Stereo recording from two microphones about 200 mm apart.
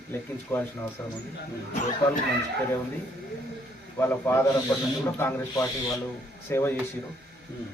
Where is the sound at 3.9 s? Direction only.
10° left (ahead or behind).